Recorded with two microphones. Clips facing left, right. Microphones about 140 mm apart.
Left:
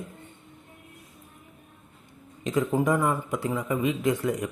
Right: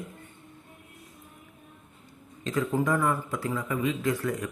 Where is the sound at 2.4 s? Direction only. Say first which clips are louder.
Left 3 dB; 20° left (ahead or behind).